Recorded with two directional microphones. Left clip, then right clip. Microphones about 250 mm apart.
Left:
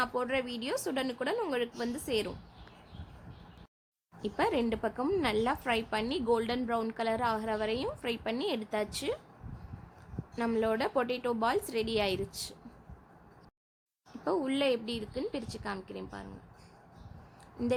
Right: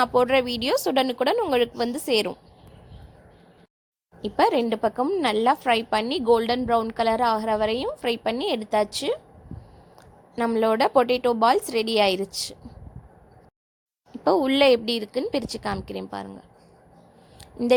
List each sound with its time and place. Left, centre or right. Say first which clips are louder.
0.0 s a woman's voice: right 12 dB; right
4.2 s a woman's voice: right 10 dB; centre
10.3 s a woman's voice: right 9 dB; right
14.3 s a woman's voice: right 12 dB; right